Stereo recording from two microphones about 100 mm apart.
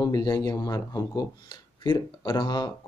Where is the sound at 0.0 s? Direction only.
40° left (ahead or behind).